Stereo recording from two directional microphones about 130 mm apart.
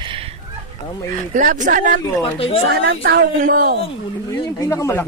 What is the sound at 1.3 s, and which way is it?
Speech, 85° right.